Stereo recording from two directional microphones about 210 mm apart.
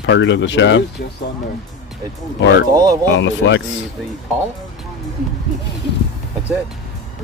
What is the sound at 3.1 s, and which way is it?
Speech, 60° left (ahead or behind).